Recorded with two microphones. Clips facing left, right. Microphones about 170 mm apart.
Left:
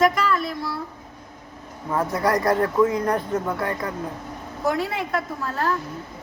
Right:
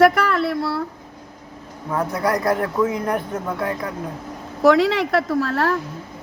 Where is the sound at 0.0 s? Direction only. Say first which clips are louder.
Right 5 dB; 65° right (ahead or behind).